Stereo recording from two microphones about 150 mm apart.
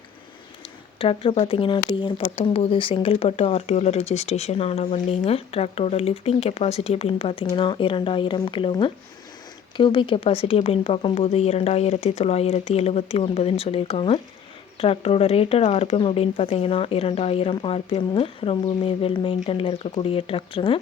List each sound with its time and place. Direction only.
0.9 s speech: 35° left (ahead or behind)